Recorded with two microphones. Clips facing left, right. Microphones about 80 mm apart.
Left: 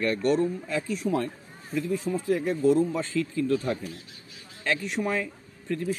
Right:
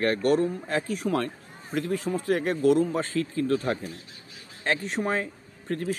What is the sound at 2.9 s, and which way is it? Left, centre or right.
Speech, right.